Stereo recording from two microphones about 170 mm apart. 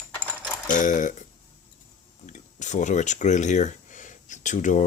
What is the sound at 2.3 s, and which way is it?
Speech, 45° left (ahead or behind).